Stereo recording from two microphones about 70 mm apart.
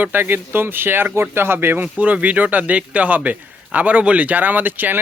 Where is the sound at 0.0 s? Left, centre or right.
Right.